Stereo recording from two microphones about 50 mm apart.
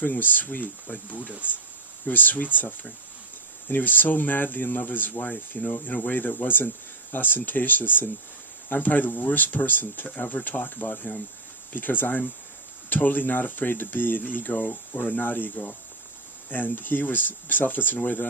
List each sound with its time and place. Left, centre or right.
0.0 s speech: left